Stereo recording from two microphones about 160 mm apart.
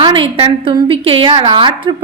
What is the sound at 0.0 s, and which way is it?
A woman's voice, 30° right (ahead or behind).